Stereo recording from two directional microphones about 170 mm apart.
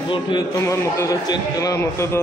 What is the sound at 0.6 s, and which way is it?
A man's voice, 15° left (ahead or behind).